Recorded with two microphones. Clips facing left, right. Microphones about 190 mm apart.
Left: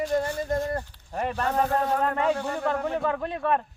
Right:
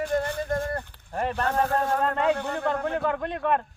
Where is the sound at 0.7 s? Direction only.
10° left (ahead or behind).